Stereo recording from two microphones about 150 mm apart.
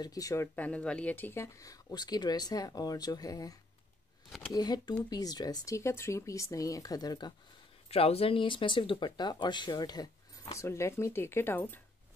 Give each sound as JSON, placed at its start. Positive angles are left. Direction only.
{"t": 0.0, "sound": "speech", "side_deg": 25}
{"t": 0.6, "sound": "speech", "side_deg": 10}
{"t": 4.6, "sound": "speech", "side_deg": 30}
{"t": 7.9, "sound": "speech", "side_deg": 40}